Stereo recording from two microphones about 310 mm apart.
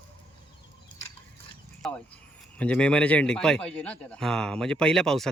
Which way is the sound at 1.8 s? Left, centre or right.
Centre.